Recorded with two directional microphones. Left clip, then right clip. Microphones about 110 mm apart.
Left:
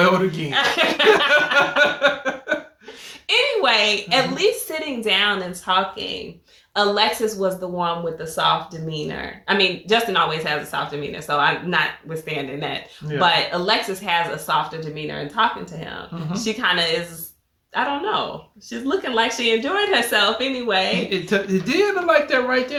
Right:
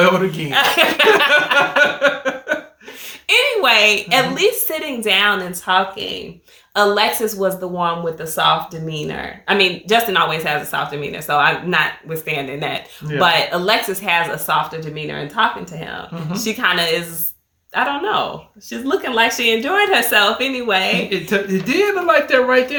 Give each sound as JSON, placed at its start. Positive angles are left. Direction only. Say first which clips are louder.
{"t": 0.0, "sound": "speech", "louder": "right 3 dB", "side_deg": 5}
{"t": 0.5, "sound": "speech", "louder": "right 5 dB", "side_deg": -40}
{"t": 1.5, "sound": "a sound", "louder": "right 3 dB", "side_deg": 0}
{"t": 3.2, "sound": "speech", "louder": "right 4 dB", "side_deg": -40}
{"t": 21.1, "sound": "speech", "louder": "right 2 dB", "side_deg": 5}